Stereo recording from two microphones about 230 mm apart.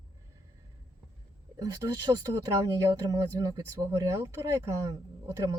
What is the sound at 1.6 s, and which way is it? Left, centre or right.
Speech, centre.